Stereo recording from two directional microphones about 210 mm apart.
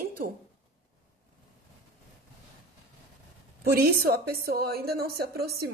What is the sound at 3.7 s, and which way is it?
A woman's voice, 45° right (ahead or behind).